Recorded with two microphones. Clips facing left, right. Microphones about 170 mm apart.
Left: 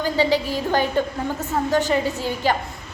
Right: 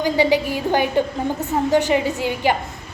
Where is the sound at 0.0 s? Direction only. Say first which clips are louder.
Right 3 dB; 15° right (ahead or behind).